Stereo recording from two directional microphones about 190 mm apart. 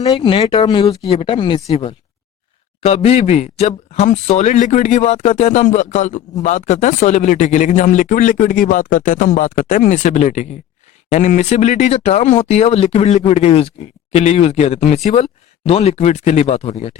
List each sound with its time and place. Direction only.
0.0 s speech: 20° left (ahead or behind)